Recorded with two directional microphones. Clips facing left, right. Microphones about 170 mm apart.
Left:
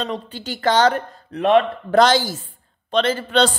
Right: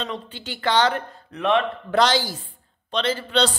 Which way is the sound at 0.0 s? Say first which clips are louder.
Left 4 dB; 40° left (ahead or behind).